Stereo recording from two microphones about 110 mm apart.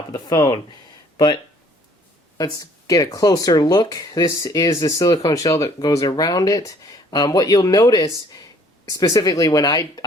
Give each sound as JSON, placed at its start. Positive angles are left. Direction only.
{"t": 0.1, "sound": "speech", "side_deg": 35}
{"t": 2.4, "sound": "speech", "side_deg": 35}